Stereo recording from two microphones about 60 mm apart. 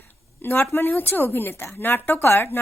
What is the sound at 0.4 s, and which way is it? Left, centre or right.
Speech, left.